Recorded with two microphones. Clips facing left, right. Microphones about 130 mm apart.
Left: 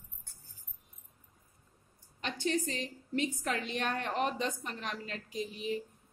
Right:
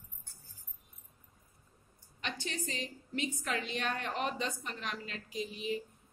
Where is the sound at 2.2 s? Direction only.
45° left (ahead or behind).